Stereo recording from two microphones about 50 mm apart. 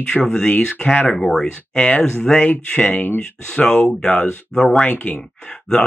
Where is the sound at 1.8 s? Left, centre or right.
Left.